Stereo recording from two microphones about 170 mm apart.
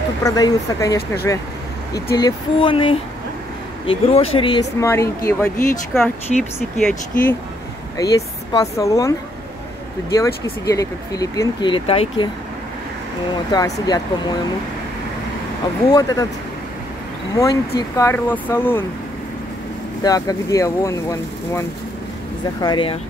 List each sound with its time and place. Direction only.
0.2 s speech: 20° left (ahead or behind)
2.1 s a sound: 25° left (ahead or behind)
4.7 s speech: 15° left (ahead or behind)
5.9 s speech: centre (ahead or behind)
8.0 s speech: 20° left (ahead or behind)
10.1 s speech: 20° left (ahead or behind); by 12.3 s 35° left (ahead or behind)
13.5 s speech: 25° left (ahead or behind)
15.9 s speech: 20° left (ahead or behind)
17.4 s speech: 20° left (ahead or behind)
20.0 s speech: 20° left (ahead or behind)